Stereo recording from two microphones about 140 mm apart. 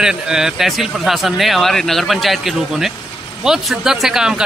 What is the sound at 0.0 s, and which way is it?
Speech, 5° right (ahead or behind).